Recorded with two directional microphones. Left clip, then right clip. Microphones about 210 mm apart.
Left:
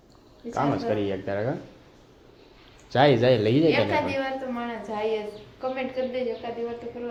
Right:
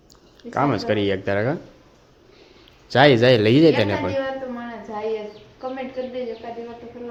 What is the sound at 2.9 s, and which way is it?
Speech, 25° right (ahead or behind).